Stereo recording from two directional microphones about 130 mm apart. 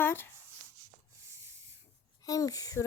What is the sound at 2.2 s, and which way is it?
Speech, 25° left (ahead or behind).